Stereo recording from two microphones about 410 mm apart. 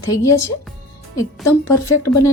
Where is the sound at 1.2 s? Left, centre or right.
Centre.